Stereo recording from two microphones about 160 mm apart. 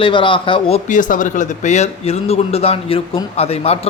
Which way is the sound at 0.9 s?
55° left (ahead or behind).